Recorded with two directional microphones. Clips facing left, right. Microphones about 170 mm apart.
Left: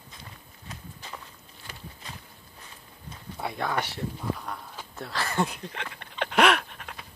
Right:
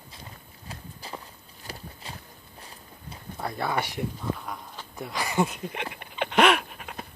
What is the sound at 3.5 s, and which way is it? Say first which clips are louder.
Speech: right 2 dB; 10° right (ahead or behind).